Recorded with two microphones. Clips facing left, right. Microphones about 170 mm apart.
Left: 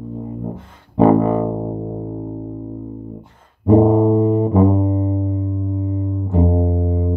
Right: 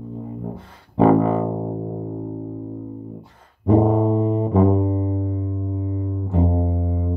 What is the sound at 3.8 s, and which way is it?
Music, 40° left (ahead or behind).